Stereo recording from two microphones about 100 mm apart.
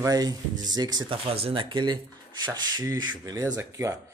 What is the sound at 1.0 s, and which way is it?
Speech, 70° right (ahead or behind).